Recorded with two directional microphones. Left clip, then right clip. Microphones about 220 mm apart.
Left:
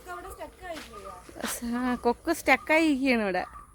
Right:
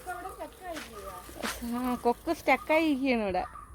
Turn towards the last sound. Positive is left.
turn(degrees=25)  # may be behind; listen again after turning